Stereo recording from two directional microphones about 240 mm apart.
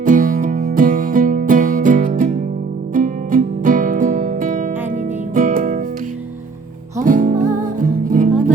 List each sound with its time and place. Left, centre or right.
0.0 s music: right
7.0 s music: right